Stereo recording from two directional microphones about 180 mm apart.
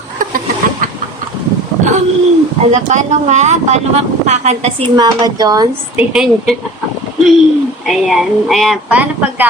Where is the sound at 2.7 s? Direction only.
40° right (ahead or behind).